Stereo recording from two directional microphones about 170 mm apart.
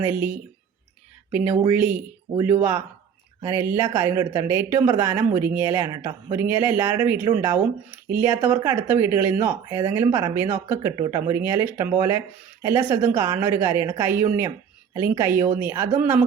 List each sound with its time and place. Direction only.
0.0 s speech: 10° right (ahead or behind)
5.9 s speech: 25° right (ahead or behind)
6.3 s speech: 10° right (ahead or behind)